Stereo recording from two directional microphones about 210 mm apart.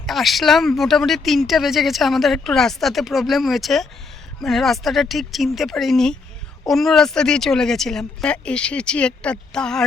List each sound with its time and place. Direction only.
0.0 s speech: centre (ahead or behind)